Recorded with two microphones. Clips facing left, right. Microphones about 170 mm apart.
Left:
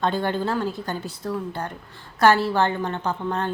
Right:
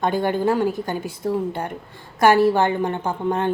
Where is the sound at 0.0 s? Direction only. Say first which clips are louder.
Right 3 dB; 15° right (ahead or behind).